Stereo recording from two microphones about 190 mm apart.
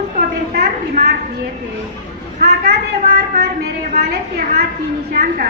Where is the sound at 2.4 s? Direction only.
55° right (ahead or behind).